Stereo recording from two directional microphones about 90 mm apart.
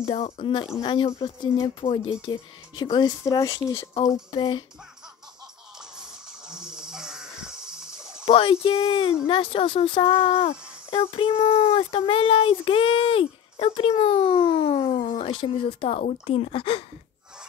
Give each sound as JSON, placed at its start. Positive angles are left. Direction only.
{"t": 0.0, "sound": "speech", "side_deg": 90}
{"t": 2.2, "sound": "speech", "side_deg": 60}
{"t": 3.9, "sound": "speech", "side_deg": 80}
{"t": 5.9, "sound": "a sound", "side_deg": -5}
{"t": 8.3, "sound": "speech", "side_deg": 90}
{"t": 9.2, "sound": "speech", "side_deg": 75}